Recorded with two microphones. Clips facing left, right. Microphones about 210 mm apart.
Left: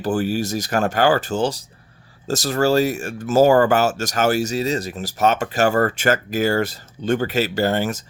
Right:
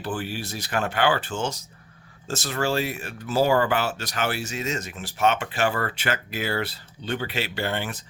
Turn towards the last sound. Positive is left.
turn(degrees=40)  # may be behind; listen again after turning